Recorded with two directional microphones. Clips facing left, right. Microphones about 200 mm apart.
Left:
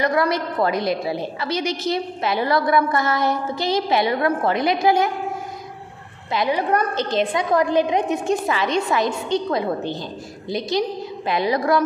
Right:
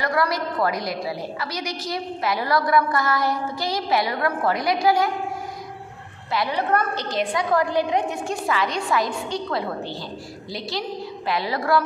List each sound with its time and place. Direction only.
0.0 s a woman's voice: 20° left (ahead or behind)
6.3 s a woman's voice: 15° left (ahead or behind)